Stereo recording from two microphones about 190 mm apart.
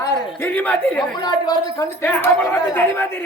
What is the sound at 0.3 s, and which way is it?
Speech, 10° left (ahead or behind).